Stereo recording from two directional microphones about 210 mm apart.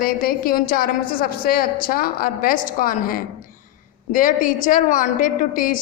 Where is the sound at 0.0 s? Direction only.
45° left (ahead or behind).